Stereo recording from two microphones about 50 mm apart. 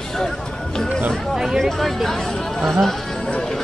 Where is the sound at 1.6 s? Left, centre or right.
Centre.